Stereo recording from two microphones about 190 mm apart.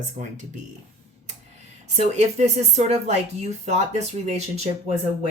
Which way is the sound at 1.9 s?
35° right (ahead or behind).